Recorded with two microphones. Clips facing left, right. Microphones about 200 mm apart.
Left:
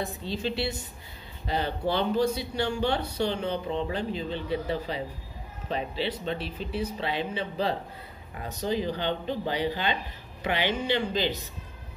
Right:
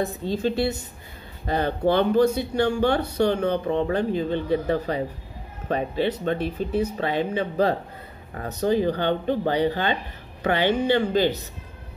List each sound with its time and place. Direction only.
0.0 s speech: 45° right (ahead or behind)